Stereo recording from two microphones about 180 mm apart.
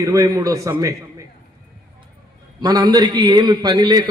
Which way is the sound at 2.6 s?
20° right (ahead or behind).